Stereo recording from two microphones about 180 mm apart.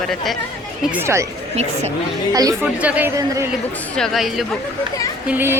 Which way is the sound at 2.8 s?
10° right (ahead or behind).